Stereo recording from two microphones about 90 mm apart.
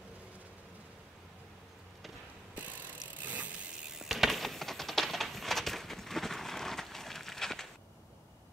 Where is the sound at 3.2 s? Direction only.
15° right (ahead or behind).